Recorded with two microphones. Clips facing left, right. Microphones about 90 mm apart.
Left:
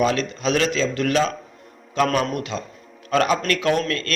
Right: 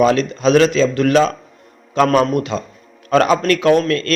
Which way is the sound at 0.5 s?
40° right (ahead or behind).